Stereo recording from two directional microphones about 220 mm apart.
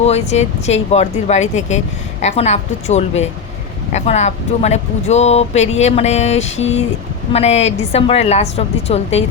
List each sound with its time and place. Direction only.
0.0 s speech: 30° left (ahead or behind)